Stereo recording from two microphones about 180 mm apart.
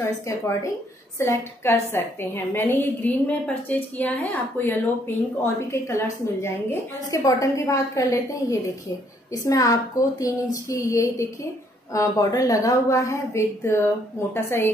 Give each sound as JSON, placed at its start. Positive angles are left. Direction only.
{"t": 1.2, "sound": "a woman's voice", "side_deg": 15}